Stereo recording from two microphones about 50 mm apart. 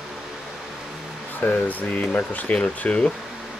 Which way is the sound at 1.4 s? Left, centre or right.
Left.